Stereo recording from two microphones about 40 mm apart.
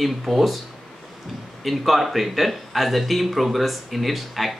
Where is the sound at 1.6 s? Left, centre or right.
Centre.